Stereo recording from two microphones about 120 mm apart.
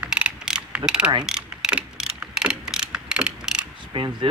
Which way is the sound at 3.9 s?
40° right (ahead or behind).